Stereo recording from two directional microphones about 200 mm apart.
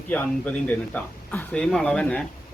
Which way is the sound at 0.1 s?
5° left (ahead or behind).